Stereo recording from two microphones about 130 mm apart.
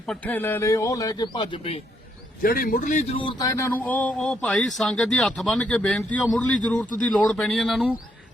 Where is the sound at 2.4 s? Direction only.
90° left; by 3.1 s 70° left (ahead or behind).